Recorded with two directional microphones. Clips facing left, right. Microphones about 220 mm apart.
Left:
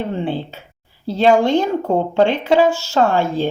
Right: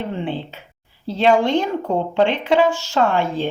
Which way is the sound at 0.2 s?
40° left (ahead or behind).